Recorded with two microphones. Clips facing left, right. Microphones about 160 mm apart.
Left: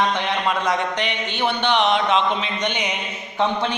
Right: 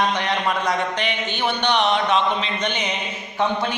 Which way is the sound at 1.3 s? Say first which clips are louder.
Left 1 dB; 20° left (ahead or behind).